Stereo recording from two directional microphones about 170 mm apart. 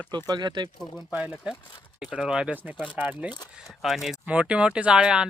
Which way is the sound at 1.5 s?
5° right (ahead or behind).